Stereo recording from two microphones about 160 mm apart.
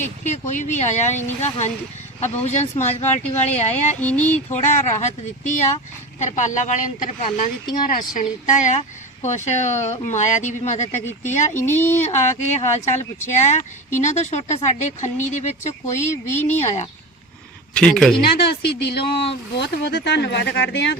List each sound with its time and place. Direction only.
0.0 s speech: 50° left (ahead or behind)
4.0 s a sound: 10° left (ahead or behind)
4.5 s speech: 45° left (ahead or behind)
11.7 s a sound: 15° left (ahead or behind)
12.0 s speech: 45° left (ahead or behind)
17.7 s speech: 5° left (ahead or behind)
18.6 s speech: 90° left